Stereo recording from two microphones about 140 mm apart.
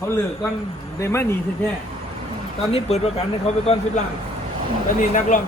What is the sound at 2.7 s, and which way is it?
Speech, 45° left (ahead or behind).